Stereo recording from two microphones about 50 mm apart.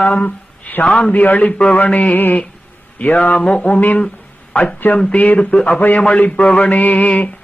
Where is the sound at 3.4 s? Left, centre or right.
Left.